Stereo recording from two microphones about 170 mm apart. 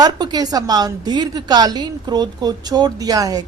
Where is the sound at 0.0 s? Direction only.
25° right (ahead or behind).